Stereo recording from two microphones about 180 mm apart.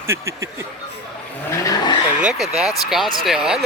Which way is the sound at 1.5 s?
20° left (ahead or behind).